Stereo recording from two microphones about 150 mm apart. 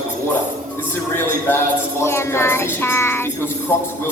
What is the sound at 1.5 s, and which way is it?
Child singing, 15° left (ahead or behind).